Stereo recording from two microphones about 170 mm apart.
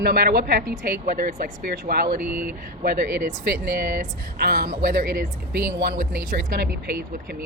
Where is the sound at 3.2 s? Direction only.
55° right (ahead or behind).